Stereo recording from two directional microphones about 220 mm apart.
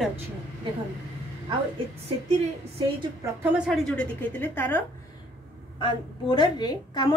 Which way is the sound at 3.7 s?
Centre (ahead or behind).